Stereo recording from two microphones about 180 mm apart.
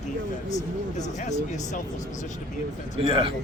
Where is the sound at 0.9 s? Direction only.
40° left (ahead or behind).